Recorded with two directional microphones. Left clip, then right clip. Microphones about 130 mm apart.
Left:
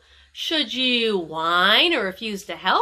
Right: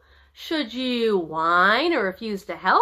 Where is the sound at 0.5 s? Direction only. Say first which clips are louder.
Left 5 dB; 10° left (ahead or behind).